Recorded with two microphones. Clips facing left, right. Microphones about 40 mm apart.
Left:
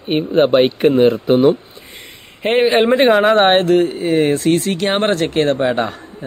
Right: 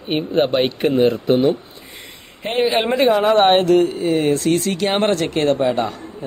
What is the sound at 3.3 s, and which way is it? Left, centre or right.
Speech, left.